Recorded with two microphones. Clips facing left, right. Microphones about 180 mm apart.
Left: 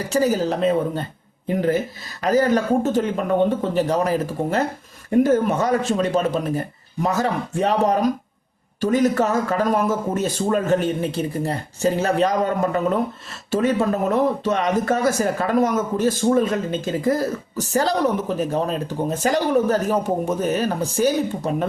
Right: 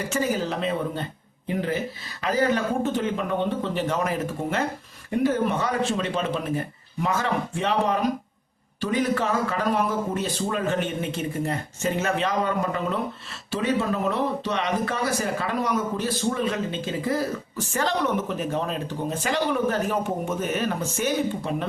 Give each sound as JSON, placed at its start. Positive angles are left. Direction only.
{"t": 0.1, "sound": "a man's voice", "side_deg": 40}